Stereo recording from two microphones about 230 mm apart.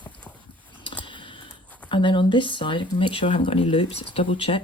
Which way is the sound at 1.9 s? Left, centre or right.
Left.